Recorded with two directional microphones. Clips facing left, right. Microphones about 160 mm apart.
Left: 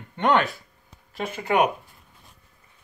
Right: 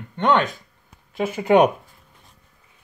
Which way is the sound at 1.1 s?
5° right (ahead or behind).